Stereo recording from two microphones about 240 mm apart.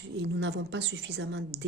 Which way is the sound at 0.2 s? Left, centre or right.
Right.